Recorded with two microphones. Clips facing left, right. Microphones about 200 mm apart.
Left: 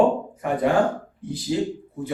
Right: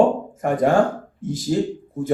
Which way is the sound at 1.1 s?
45° right (ahead or behind).